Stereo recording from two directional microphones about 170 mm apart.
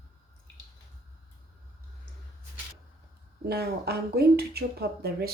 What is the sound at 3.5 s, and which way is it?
Speech, 65° right (ahead or behind).